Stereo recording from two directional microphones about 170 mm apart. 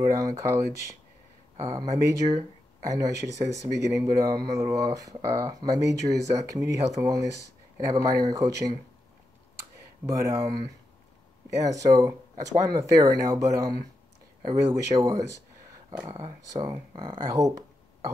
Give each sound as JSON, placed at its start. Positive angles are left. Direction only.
{"t": 0.0, "sound": "speech", "side_deg": -20}
{"t": 1.6, "sound": "speech", "side_deg": -20}
{"t": 10.0, "sound": "speech", "side_deg": -20}